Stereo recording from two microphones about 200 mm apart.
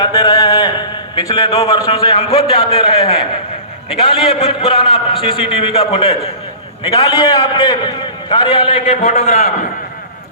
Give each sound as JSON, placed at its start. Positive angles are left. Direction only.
{"t": 0.0, "sound": "a man's voice", "side_deg": 20}
{"t": 9.0, "sound": "a man's voice", "side_deg": 40}